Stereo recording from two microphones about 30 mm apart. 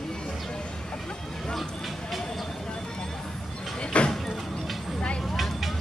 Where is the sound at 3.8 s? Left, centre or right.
Left.